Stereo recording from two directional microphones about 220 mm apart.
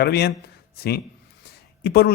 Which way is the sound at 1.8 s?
45° left (ahead or behind).